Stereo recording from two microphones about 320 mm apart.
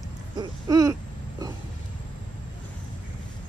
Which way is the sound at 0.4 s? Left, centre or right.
Centre.